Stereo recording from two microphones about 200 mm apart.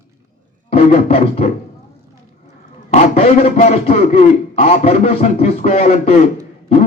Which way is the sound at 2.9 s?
35° left (ahead or behind).